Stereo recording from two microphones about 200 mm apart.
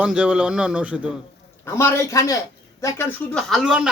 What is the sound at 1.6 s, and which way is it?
A man's voice, 10° left (ahead or behind).